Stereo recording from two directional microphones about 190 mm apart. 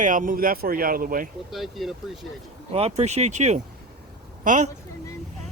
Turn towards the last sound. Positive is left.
turn(degrees=-40)  # may be behind; listen again after turning